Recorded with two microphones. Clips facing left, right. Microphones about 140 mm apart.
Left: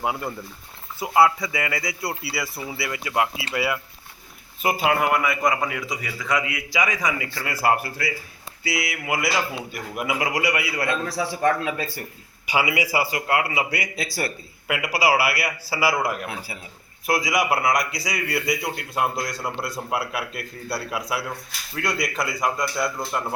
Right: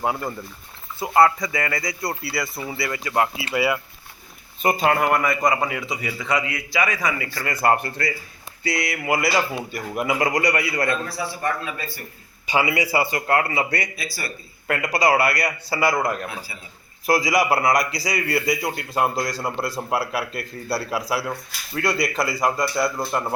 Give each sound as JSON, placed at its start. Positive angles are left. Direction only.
{"t": 0.0, "sound": "a man's voice", "side_deg": 5}
{"t": 6.4, "sound": "a man's voice", "side_deg": 10}
{"t": 11.4, "sound": "speech", "side_deg": 90}
{"t": 12.5, "sound": "a man's voice", "side_deg": 10}
{"t": 13.9, "sound": "speech", "side_deg": 80}
{"t": 14.7, "sound": "a man's voice", "side_deg": 5}
{"t": 17.1, "sound": "speech", "side_deg": 0}